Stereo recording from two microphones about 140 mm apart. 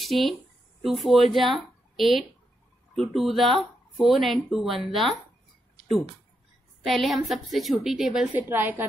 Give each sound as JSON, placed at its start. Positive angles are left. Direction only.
{"t": 0.0, "sound": "a woman's voice", "side_deg": 0}
{"t": 6.9, "sound": "speech", "side_deg": 0}